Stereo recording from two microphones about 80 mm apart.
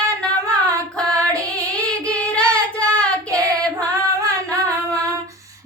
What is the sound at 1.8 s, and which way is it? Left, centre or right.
Singing, centre.